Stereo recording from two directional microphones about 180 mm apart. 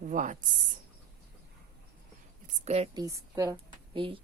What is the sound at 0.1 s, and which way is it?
Speech, 45° right (ahead or behind).